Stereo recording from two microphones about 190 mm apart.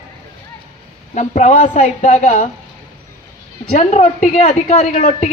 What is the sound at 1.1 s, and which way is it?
A woman's voice, 40° left (ahead or behind).